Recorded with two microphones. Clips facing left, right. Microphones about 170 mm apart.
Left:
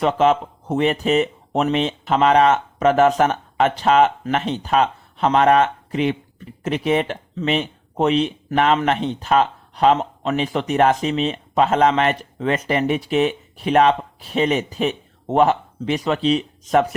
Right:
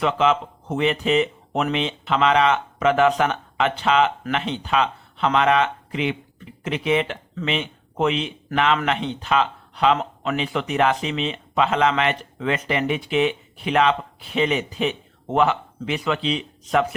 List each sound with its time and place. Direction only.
0.0 s a man's voice: 40° left (ahead or behind)